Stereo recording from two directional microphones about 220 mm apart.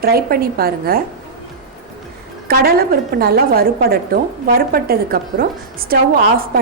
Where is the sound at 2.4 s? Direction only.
45° right (ahead or behind).